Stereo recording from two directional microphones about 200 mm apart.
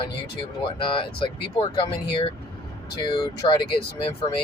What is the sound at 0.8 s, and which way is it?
Speech, 25° left (ahead or behind).